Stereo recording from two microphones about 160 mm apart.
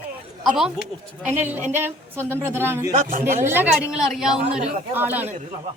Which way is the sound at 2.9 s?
55° right (ahead or behind).